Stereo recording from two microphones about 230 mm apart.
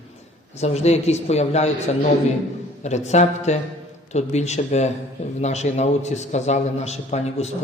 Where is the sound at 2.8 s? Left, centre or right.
Left.